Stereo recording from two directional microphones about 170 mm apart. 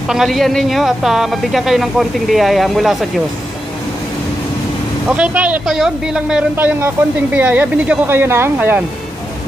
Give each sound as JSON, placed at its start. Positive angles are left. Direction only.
{"t": 0.1, "sound": "speech", "side_deg": 0}
{"t": 5.0, "sound": "speech", "side_deg": -10}